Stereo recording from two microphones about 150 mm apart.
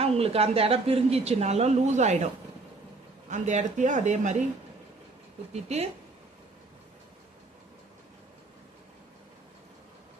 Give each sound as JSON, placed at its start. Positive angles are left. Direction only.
{"t": 0.0, "sound": "a woman's voice", "side_deg": -40}
{"t": 3.2, "sound": "a woman's voice", "side_deg": -55}
{"t": 5.6, "sound": "a woman's voice", "side_deg": -45}